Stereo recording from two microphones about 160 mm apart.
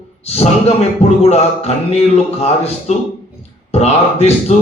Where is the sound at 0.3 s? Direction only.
40° left (ahead or behind).